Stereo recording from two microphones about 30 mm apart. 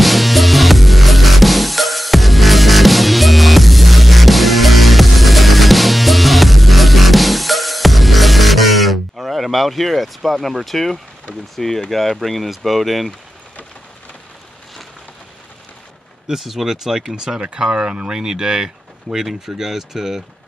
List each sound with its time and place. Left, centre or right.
0.0 s music: centre
9.3 s speech: centre
16.3 s speech: centre; by 17.8 s right
17.8 s speech: right
18.1 s speech: right
19.1 s speech: centre